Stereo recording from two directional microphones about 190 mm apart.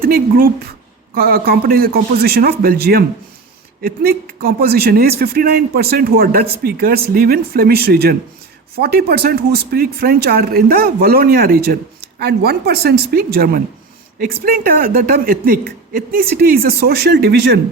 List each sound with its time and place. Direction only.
0.0 s a man's voice: 50° right (ahead or behind)